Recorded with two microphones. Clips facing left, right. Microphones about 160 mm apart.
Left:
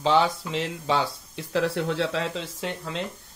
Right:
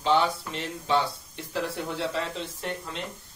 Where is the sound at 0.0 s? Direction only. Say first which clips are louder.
Left 2 dB; 90° left.